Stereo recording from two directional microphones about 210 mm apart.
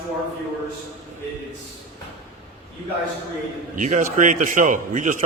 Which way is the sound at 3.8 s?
35° right (ahead or behind).